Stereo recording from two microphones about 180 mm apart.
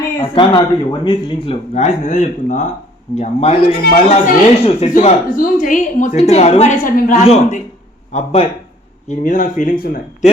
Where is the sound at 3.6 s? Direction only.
55° left (ahead or behind).